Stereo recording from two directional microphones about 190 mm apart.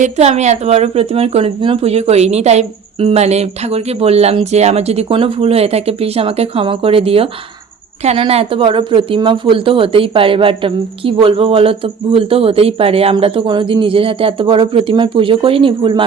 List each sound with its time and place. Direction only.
0.0 s speech: 35° right (ahead or behind)